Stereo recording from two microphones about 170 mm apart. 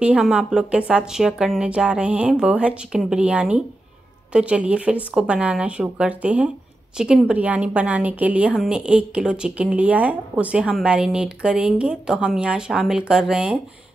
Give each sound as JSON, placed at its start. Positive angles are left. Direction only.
{"t": 0.0, "sound": "a woman's voice", "side_deg": -5}